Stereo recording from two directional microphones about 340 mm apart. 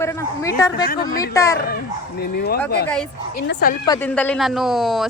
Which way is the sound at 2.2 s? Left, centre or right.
Left.